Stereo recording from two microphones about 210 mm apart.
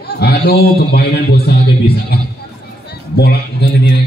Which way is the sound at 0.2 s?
50° left (ahead or behind).